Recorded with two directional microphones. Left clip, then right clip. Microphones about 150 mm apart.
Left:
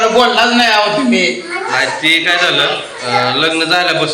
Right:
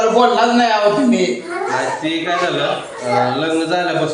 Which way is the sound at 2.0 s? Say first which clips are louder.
Left 7 dB; 25° right (ahead or behind).